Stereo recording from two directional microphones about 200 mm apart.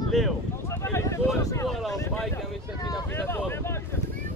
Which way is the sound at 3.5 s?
10° left (ahead or behind).